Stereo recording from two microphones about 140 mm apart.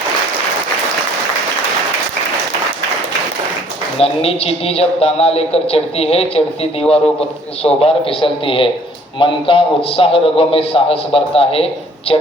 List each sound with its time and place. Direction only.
3.9 s a woman's voice: 45° left (ahead or behind)